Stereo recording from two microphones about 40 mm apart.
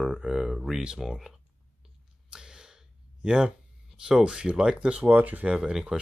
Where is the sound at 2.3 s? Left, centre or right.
Centre.